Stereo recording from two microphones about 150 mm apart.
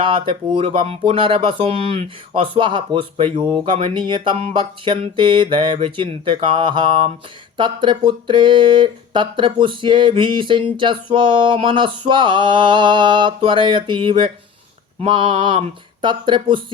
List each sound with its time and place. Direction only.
0.0 s speech: 35° right (ahead or behind)